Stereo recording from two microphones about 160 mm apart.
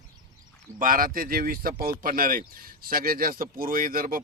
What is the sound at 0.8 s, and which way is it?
Speech, 60° right (ahead or behind).